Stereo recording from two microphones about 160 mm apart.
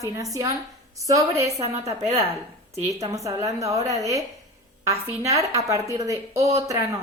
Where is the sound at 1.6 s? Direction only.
40° right (ahead or behind).